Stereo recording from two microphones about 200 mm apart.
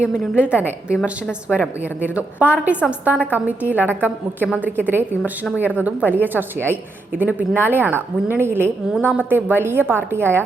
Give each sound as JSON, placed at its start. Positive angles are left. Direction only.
{"t": 0.0, "sound": "a woman's voice", "side_deg": -5}